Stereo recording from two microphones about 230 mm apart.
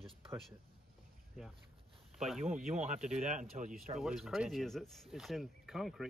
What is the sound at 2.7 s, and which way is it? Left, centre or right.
Speech, right.